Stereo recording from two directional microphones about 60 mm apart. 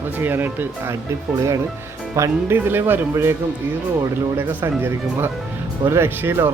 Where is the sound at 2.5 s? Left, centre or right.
Right.